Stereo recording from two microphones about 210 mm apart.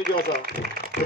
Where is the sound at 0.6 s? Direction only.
50° right (ahead or behind).